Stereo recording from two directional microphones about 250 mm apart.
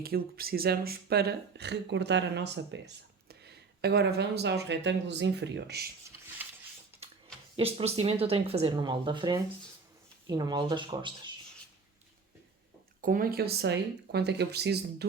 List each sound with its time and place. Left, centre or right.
0.0 s speech: right
7.0 s a sound: right
7.5 s speech: right
13.0 s speech: right